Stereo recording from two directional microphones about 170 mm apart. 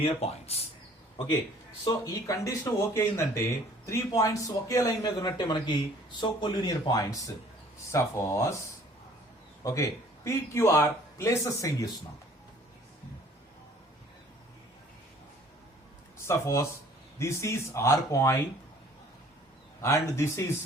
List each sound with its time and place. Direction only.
0.0 s speech: 35° left (ahead or behind)
1.8 s speech: 20° left (ahead or behind)
9.6 s speech: 20° left (ahead or behind)
16.2 s speech: 15° left (ahead or behind)
19.8 s speech: 15° left (ahead or behind)